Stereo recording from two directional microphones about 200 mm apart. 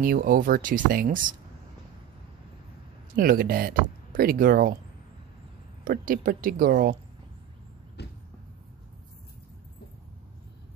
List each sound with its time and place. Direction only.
0.0 s speech: 45° right (ahead or behind)
3.2 s speech: 45° right (ahead or behind)
5.9 s speech: 45° right (ahead or behind)
8.0 s a sound: 55° left (ahead or behind)